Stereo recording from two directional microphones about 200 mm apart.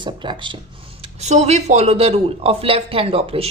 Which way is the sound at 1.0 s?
35° right (ahead or behind).